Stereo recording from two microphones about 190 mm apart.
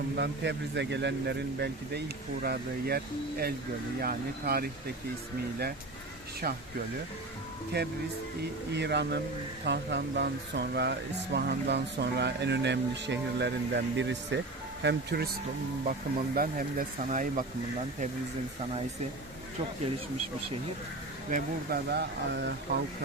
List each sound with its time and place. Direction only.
0.2 s speech: 65° right (ahead or behind)
7.8 s speech: 60° right (ahead or behind)
15.9 s speech: 50° right (ahead or behind)
21.2 s speech: 50° right (ahead or behind)